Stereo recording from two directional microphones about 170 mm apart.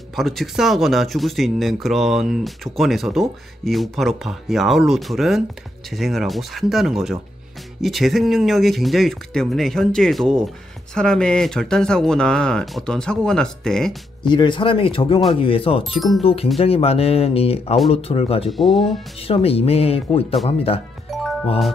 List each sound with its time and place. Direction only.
0.1 s speech: centre (ahead or behind)
14.2 s speech: 25° left (ahead or behind)
15.9 s speech: centre (ahead or behind)
16.2 s speech: 35° left (ahead or behind)
18.5 s speech: centre (ahead or behind)
19.2 s speech: 35° left (ahead or behind)
21.1 s music: centre (ahead or behind)